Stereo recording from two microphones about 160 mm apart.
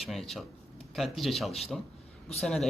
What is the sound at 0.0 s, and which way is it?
Speech, centre (ahead or behind).